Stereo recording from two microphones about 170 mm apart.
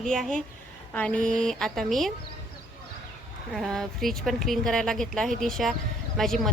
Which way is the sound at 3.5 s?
Centre (ahead or behind).